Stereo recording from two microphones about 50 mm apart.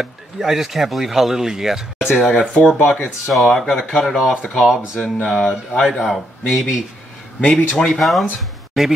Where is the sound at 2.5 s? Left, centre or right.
Left.